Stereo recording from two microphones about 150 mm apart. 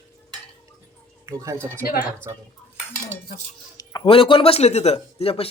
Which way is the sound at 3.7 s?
25° left (ahead or behind).